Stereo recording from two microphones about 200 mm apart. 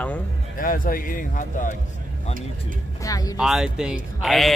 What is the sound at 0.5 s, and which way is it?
Speech, 45° left (ahead or behind).